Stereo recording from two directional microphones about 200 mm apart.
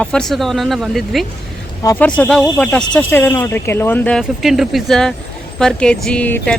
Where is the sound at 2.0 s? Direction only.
5° left (ahead or behind).